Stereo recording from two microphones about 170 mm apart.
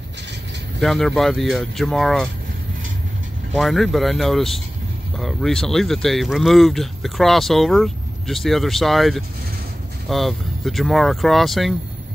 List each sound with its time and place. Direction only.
0.7 s speech: centre (ahead or behind)
3.5 s speech: centre (ahead or behind)